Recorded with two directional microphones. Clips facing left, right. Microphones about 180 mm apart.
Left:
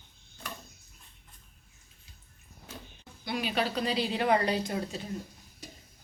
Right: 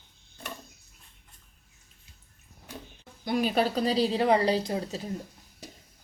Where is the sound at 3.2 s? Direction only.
45° right (ahead or behind).